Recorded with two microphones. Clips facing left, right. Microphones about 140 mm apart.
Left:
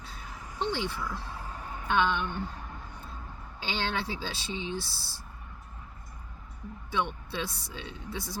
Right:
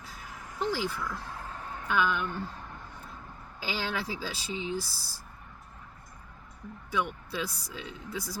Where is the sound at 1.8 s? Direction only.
25° left (ahead or behind).